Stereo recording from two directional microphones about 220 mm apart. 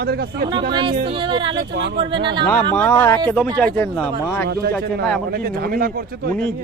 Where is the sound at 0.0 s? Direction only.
45° right (ahead or behind).